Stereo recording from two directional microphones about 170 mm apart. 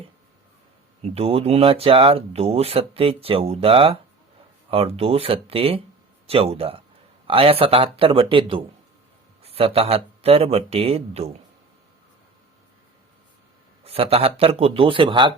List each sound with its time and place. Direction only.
1.0 s speech: 35° right (ahead or behind)
13.8 s speech: 35° right (ahead or behind)